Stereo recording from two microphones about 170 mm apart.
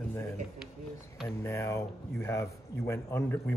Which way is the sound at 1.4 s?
15° left (ahead or behind).